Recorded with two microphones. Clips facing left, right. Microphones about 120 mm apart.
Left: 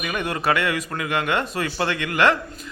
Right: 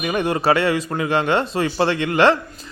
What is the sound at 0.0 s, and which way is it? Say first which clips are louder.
A man's voice: right 5 dB; 30° right (ahead or behind).